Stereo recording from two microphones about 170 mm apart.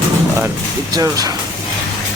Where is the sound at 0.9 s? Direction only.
20° right (ahead or behind).